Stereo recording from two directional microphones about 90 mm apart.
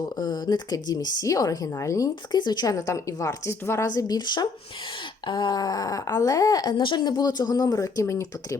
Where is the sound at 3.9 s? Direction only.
45° left (ahead or behind).